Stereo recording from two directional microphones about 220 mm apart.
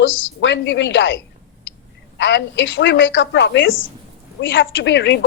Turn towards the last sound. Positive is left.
turn(degrees=55)  # may be behind; listen again after turning